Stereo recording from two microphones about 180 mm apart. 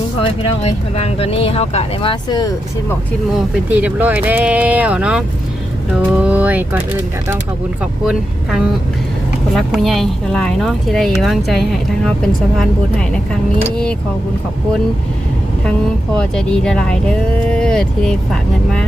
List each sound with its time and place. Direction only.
0.2 s speech: 35° left (ahead or behind)
3.3 s speech: 5° right (ahead or behind)
8.0 s speech: 5° right (ahead or behind)
16.1 s speech: 5° left (ahead or behind)